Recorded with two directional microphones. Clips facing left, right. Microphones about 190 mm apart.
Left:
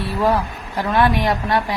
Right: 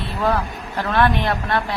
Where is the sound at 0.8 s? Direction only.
10° left (ahead or behind).